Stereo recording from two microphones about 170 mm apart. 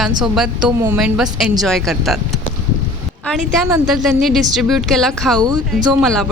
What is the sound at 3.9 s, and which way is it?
A woman's voice, centre (ahead or behind).